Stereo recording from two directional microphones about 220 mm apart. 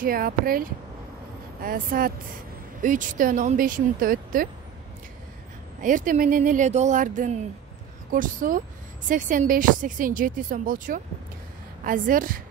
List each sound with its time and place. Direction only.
0.0 s speech: 40° right (ahead or behind)
5.8 s speech: 35° right (ahead or behind)